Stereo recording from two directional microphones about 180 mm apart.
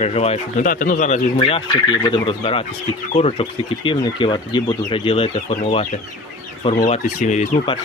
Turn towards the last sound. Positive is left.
turn(degrees=40)  # may be behind; listen again after turning